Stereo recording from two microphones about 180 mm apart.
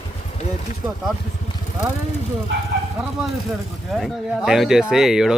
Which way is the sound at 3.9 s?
Centre (ahead or behind).